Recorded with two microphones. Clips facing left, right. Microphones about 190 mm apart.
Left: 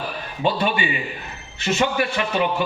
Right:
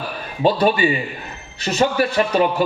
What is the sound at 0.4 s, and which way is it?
A man's voice, 40° right (ahead or behind).